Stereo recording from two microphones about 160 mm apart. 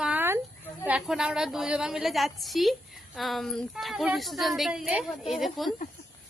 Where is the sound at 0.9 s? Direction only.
5° right (ahead or behind).